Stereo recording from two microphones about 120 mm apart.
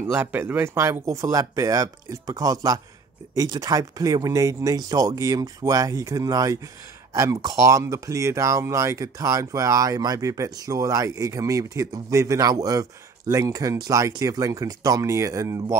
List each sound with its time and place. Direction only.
0.1 s speech: 15° right (ahead or behind)